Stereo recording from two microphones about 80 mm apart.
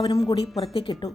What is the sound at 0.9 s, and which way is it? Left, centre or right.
Speech, left.